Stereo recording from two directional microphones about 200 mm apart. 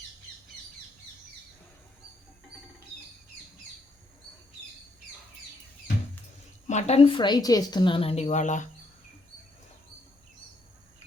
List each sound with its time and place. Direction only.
6.7 s a woman's voice: 35° left (ahead or behind)